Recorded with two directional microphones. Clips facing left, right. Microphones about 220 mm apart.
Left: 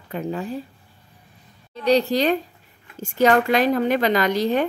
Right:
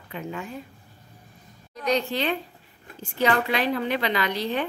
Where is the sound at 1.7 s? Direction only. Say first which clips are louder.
Left 7 dB; 35° left (ahead or behind).